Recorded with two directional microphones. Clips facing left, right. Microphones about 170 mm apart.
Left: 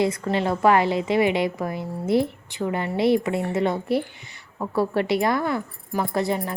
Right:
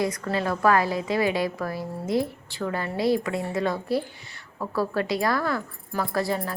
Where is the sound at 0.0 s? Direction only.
25° left (ahead or behind).